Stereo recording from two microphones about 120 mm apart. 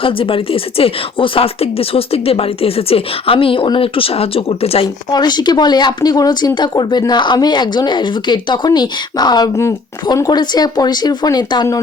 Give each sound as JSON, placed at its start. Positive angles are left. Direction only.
{"t": 0.0, "sound": "speech", "side_deg": 50}
{"t": 5.1, "sound": "speech", "side_deg": 35}